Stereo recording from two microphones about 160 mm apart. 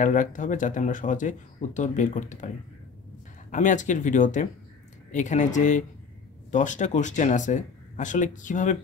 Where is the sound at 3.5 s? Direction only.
50° left (ahead or behind).